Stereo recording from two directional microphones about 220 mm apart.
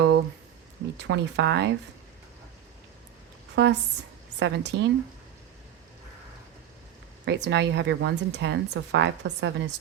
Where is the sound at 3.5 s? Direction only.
50° right (ahead or behind).